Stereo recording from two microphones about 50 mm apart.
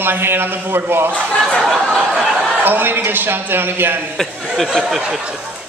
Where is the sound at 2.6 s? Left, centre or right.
Right.